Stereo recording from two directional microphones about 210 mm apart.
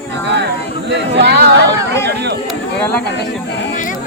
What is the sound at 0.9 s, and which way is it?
Speech, 55° right (ahead or behind).